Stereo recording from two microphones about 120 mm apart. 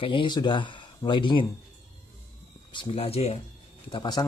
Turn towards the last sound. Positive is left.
turn(degrees=40)  # may be behind; listen again after turning